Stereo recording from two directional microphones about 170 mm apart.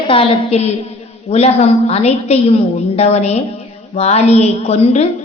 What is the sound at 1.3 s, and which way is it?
A woman's voice, 40° left (ahead or behind).